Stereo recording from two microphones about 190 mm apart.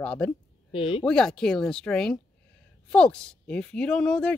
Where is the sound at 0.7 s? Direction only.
30° left (ahead or behind).